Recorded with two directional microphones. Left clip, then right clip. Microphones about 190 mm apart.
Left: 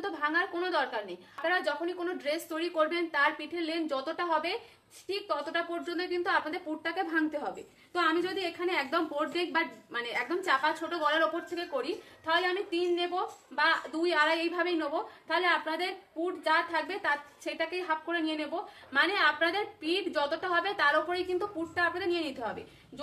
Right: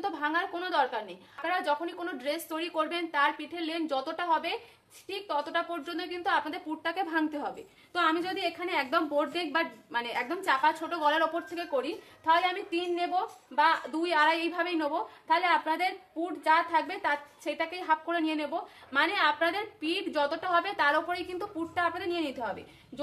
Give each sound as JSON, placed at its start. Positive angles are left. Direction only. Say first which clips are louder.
{"t": 0.0, "sound": "a woman's voice", "louder": "even", "side_deg": -20}